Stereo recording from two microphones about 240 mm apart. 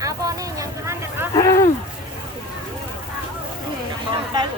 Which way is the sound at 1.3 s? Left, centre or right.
Centre.